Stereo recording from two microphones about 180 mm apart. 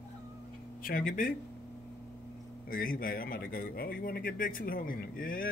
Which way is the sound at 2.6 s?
50° left (ahead or behind).